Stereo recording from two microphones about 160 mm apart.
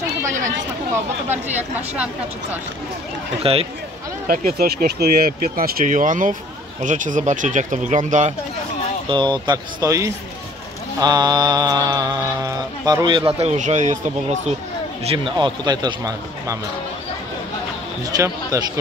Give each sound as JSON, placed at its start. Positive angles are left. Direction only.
{"t": 3.4, "sound": "speech", "side_deg": -35}
{"t": 4.3, "sound": "speech", "side_deg": -65}
{"t": 9.1, "sound": "mantra", "side_deg": -30}
{"t": 15.0, "sound": "mantra", "side_deg": -30}
{"t": 18.0, "sound": "mantra", "side_deg": -20}